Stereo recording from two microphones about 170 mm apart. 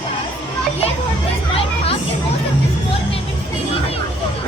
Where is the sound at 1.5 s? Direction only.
35° left (ahead or behind).